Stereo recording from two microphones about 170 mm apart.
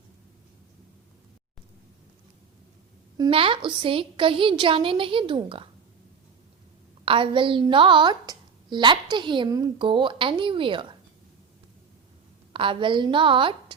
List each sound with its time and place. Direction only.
3.2 s a woman's voice: 30° right (ahead or behind)
7.0 s a woman's voice: 30° right (ahead or behind)
12.5 s a woman's voice: 30° right (ahead or behind)